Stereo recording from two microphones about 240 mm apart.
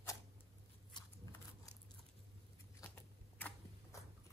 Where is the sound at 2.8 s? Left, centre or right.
Centre.